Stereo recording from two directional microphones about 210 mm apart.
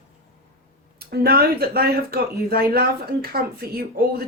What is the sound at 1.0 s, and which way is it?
Speech, 50° right (ahead or behind).